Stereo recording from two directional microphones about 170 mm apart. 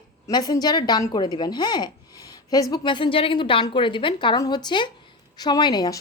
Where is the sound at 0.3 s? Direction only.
25° left (ahead or behind).